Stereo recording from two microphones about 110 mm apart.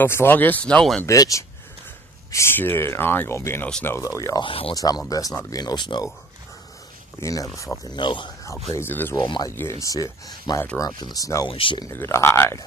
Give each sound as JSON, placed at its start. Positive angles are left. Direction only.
{"t": 0.0, "sound": "speech", "side_deg": 20}
{"t": 1.0, "sound": "speech", "side_deg": 30}
{"t": 4.4, "sound": "speech", "side_deg": 55}
{"t": 4.7, "sound": "speech", "side_deg": 35}
{"t": 7.2, "sound": "speech", "side_deg": 30}
{"t": 8.0, "sound": "speech", "side_deg": 45}
{"t": 8.7, "sound": "speech", "side_deg": 20}
{"t": 9.2, "sound": "speech", "side_deg": 45}
{"t": 9.5, "sound": "speech", "side_deg": 25}
{"t": 11.4, "sound": "speech", "side_deg": 50}
{"t": 11.9, "sound": "speech", "side_deg": 25}